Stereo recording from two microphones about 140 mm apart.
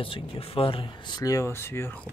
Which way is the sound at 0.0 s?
40° left (ahead or behind).